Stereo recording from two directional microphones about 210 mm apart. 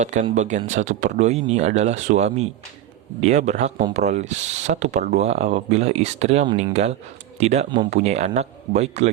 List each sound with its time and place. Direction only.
0.0 s speech: 35° right (ahead or behind)